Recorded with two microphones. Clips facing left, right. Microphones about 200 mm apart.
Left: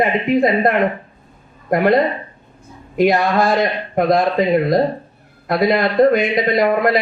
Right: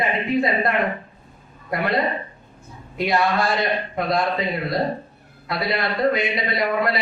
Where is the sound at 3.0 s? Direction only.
50° left (ahead or behind).